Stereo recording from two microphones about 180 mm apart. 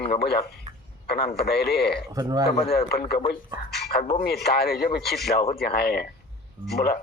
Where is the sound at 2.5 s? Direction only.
35° left (ahead or behind).